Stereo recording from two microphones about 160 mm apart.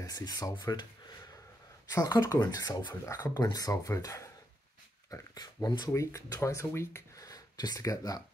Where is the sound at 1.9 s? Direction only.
20° left (ahead or behind).